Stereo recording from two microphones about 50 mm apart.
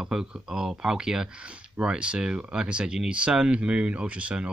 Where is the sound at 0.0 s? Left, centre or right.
Centre.